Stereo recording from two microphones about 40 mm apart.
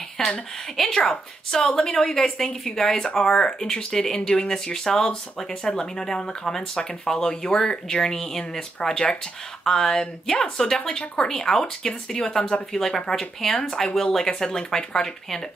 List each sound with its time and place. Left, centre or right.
0.2 s speech: centre